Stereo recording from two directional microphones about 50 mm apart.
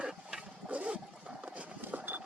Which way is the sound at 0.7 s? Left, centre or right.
Right.